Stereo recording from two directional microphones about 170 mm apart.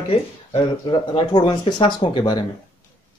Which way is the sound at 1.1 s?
30° left (ahead or behind).